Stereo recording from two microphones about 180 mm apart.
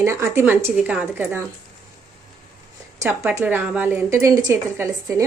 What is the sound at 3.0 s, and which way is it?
Speech, 15° right (ahead or behind).